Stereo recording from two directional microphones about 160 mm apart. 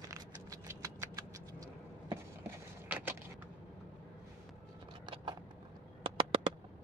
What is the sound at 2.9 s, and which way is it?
Vehicle, 15° right (ahead or behind).